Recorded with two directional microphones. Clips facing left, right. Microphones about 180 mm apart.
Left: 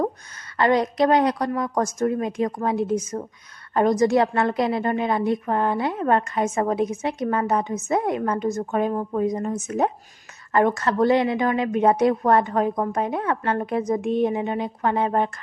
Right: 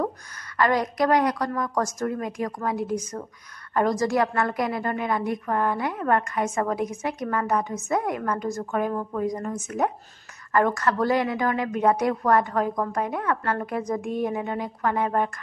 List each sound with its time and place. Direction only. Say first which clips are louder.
0.6 s a woman's voice: left 3 dB; 25° left (ahead or behind)